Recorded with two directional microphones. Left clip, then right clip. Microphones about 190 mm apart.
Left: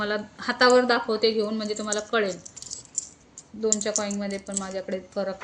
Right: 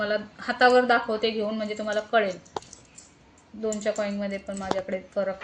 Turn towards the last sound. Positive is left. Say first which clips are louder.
# right 1 dB
turn(degrees=35)  # may be behind; listen again after turning